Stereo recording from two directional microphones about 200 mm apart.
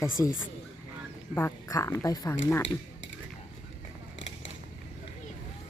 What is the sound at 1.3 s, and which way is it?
Speech, 15° left (ahead or behind).